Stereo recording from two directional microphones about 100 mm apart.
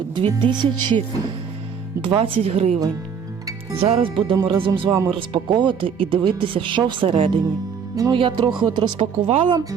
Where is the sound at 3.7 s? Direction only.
75° right (ahead or behind); by 4.3 s 60° right (ahead or behind).